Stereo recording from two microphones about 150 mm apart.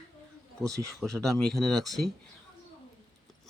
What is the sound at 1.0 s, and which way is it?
Speech, 5° left (ahead or behind).